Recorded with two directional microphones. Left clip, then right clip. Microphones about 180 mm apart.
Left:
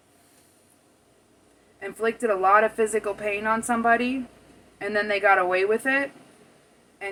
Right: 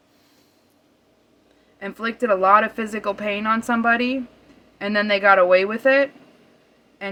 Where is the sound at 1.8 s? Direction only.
60° right (ahead or behind).